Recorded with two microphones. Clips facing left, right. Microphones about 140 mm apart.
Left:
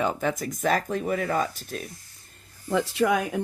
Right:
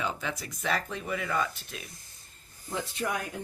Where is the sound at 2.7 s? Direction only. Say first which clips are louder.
Left 10 dB; 85° left.